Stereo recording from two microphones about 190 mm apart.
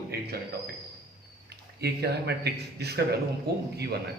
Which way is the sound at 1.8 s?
60° right (ahead or behind).